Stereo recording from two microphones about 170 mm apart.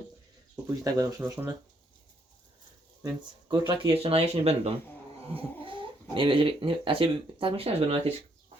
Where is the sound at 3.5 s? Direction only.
30° right (ahead or behind).